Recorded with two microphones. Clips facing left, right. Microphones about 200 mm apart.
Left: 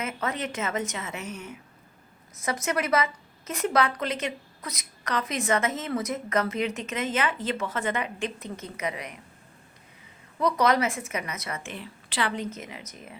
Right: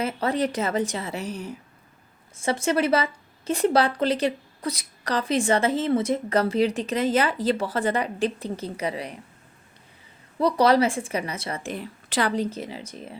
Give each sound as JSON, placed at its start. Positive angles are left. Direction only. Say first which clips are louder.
{"t": 0.0, "sound": "a woman's voice", "louder": "right 6 dB", "side_deg": -35}
{"t": 10.3, "sound": "a woman's voice", "louder": "right 4 dB", "side_deg": -30}